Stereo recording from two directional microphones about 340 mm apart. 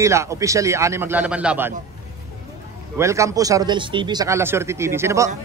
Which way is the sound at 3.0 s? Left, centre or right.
Centre.